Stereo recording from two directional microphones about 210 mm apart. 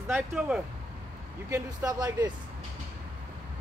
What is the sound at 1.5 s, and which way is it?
Speech, 15° right (ahead or behind).